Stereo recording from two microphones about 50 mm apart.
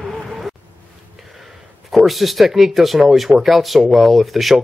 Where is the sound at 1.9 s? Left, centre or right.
Centre.